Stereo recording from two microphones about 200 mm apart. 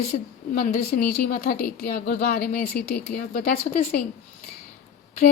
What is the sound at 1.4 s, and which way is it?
A woman's voice, 50° left (ahead or behind).